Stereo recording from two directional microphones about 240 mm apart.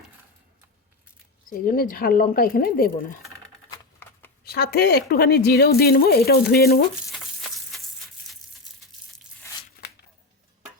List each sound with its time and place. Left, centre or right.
1.5 s a woman's voice: left
4.4 s a woman's voice: left
7.1 s sizzle: centre